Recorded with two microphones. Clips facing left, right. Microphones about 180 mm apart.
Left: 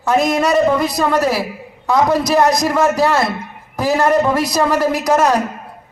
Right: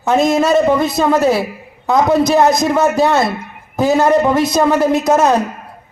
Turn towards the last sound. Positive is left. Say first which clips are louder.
# right 2 dB
turn(degrees=-25)  # may be behind; listen again after turning